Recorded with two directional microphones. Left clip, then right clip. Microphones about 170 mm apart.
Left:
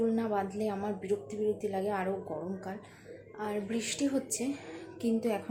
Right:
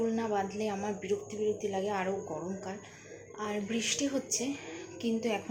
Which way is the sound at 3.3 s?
Centre (ahead or behind).